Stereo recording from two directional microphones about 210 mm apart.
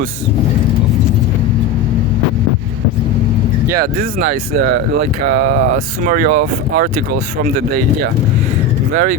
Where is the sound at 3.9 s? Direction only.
40° right (ahead or behind).